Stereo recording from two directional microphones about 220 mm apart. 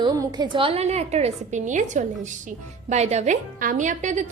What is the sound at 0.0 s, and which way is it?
A woman's voice, 20° right (ahead or behind).